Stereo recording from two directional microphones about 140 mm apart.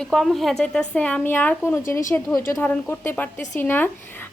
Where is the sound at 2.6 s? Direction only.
15° left (ahead or behind).